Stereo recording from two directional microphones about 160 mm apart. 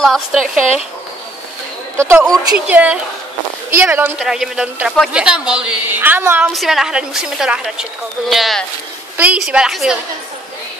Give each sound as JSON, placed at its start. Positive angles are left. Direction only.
{"t": 0.0, "sound": "a man's voice", "side_deg": 0}
{"t": 2.0, "sound": "a woman's voice", "side_deg": -15}
{"t": 4.2, "sound": "a man's voice", "side_deg": -5}
{"t": 6.5, "sound": "a man's voice", "side_deg": 0}